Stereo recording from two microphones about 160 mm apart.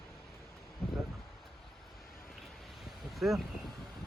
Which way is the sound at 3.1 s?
Centre (ahead or behind).